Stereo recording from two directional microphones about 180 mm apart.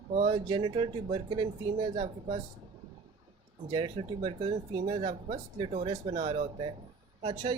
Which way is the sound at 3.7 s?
30° right (ahead or behind).